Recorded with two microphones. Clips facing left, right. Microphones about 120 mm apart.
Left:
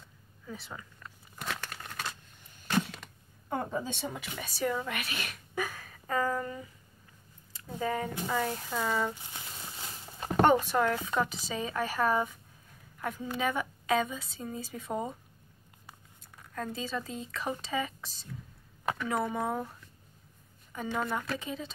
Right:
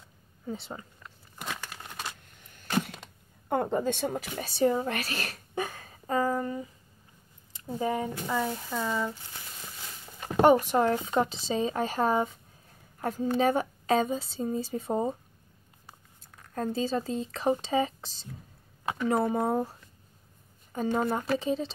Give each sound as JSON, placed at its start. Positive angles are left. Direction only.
{"t": 0.5, "sound": "a woman's voice", "side_deg": -30}
{"t": 1.0, "sound": "a sound", "side_deg": -5}
{"t": 1.8, "sound": "a sound", "side_deg": -20}
{"t": 3.4, "sound": "a woman's voice", "side_deg": -65}
{"t": 4.2, "sound": "a woman's voice", "side_deg": -40}
{"t": 7.7, "sound": "speech", "side_deg": -20}
{"t": 8.3, "sound": "speech", "side_deg": -5}
{"t": 8.6, "sound": "speech", "side_deg": 10}
{"t": 10.8, "sound": "a woman's voice", "side_deg": -25}
{"t": 16.5, "sound": "a woman's voice", "side_deg": -35}